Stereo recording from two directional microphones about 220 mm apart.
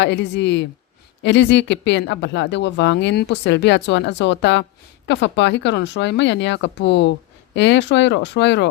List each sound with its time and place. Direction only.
0.0 s speech: 55° left (ahead or behind)